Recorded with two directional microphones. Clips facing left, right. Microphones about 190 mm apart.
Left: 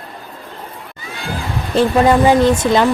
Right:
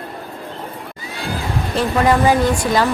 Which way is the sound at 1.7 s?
25° left (ahead or behind).